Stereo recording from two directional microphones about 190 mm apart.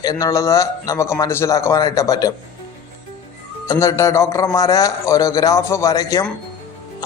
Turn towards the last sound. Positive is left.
turn(degrees=20)  # may be behind; listen again after turning